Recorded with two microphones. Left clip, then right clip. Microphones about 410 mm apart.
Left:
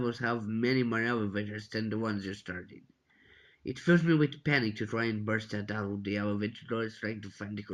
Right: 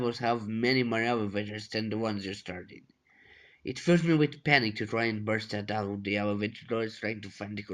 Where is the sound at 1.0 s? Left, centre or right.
Right.